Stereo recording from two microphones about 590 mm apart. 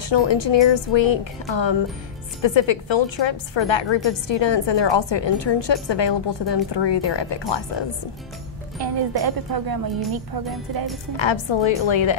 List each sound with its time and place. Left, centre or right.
0.1 s a woman's voice: left
8.7 s speech: right
11.1 s a woman's voice: left